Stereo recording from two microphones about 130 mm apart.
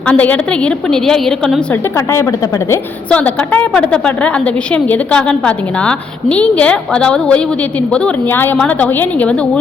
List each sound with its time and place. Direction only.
0.1 s a woman's voice: 10° left (ahead or behind)
1.7 s a woman's voice: 20° left (ahead or behind)
3.1 s a woman's voice: 10° left (ahead or behind)